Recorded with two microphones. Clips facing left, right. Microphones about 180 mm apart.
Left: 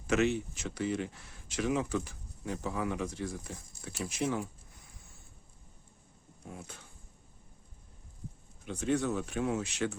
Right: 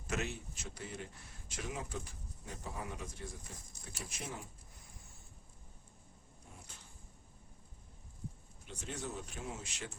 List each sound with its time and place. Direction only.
0.1 s speech: 80° left
3.9 s speech: 75° left (ahead or behind)
8.6 s speech: 65° left (ahead or behind)